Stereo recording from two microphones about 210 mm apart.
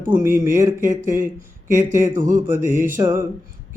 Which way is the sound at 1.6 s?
10° right (ahead or behind).